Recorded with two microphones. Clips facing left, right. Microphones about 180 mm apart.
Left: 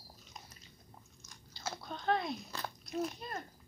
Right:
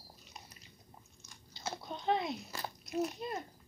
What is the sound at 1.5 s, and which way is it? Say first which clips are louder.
Biting: right 1 dB; 20° right (ahead or behind).